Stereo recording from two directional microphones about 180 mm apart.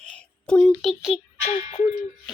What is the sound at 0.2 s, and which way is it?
A child's voice, 5° left (ahead or behind).